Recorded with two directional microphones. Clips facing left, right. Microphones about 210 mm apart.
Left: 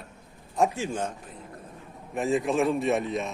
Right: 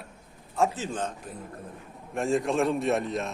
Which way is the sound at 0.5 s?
15° left (ahead or behind).